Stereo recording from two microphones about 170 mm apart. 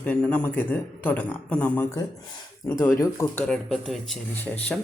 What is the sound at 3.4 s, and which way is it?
Speech, centre (ahead or behind).